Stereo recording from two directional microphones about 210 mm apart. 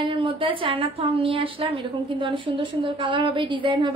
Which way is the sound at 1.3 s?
25° right (ahead or behind).